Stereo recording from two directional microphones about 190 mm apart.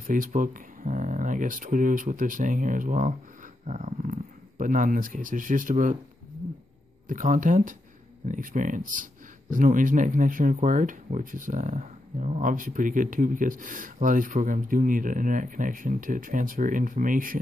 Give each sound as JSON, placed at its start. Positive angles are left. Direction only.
{"t": 0.0, "sound": "speech", "side_deg": -45}
{"t": 7.1, "sound": "speech", "side_deg": -45}